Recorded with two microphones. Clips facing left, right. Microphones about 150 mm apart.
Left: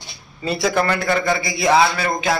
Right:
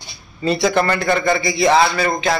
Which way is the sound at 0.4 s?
5° left (ahead or behind).